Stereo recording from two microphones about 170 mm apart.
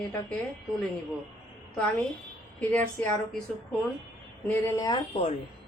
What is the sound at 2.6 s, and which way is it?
Speech, 10° left (ahead or behind).